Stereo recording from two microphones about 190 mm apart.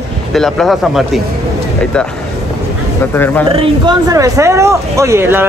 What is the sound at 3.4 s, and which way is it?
Speech, 30° right (ahead or behind).